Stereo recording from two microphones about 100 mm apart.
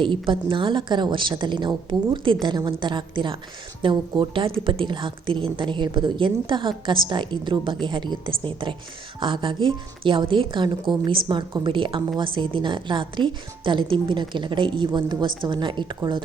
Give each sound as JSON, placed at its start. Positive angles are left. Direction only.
{"t": 0.0, "sound": "a woman's voice", "side_deg": -60}